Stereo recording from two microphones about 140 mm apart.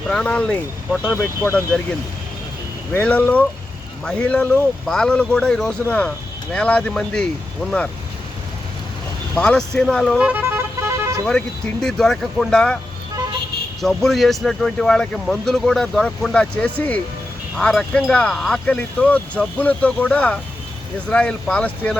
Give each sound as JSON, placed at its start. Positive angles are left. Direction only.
{"t": 0.1, "sound": "speech", "side_deg": 5}
{"t": 2.9, "sound": "speech", "side_deg": 10}
{"t": 9.4, "sound": "speech", "side_deg": 5}
{"t": 10.2, "sound": "vehicle", "side_deg": -10}
{"t": 11.3, "sound": "speech", "side_deg": 5}
{"t": 13.8, "sound": "speech", "side_deg": 0}